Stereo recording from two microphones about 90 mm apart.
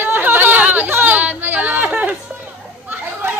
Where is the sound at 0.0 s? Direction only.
25° right (ahead or behind).